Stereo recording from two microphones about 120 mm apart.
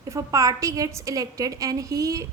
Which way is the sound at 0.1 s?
25° right (ahead or behind).